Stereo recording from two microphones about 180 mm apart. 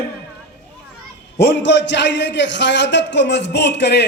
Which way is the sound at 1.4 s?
75° left (ahead or behind).